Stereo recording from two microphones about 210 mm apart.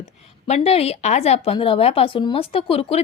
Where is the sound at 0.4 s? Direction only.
30° left (ahead or behind).